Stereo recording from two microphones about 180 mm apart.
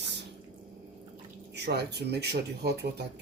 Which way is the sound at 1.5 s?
70° right (ahead or behind).